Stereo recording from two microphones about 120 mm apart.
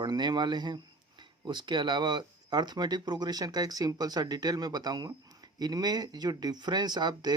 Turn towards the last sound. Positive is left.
turn(degrees=-35)  # may be behind; listen again after turning